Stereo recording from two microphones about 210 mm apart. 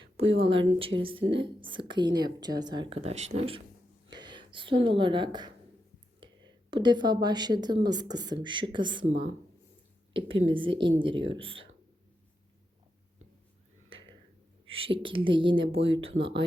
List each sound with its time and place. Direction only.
0.3 s a woman's voice: 25° right (ahead or behind)
6.2 s whispering: 25° right (ahead or behind)
6.7 s speech: 20° right (ahead or behind)
10.1 s speech: 25° right (ahead or behind)
14.7 s speech: 25° right (ahead or behind)